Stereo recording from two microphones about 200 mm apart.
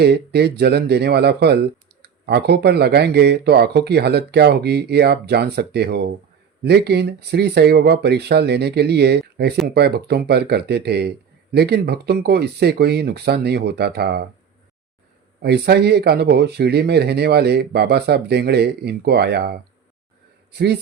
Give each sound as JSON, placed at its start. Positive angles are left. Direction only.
{"t": 0.0, "sound": "speech", "side_deg": -55}
{"t": 15.4, "sound": "speech", "side_deg": -55}